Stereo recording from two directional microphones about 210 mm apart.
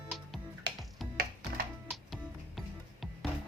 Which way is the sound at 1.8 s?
Centre (ahead or behind).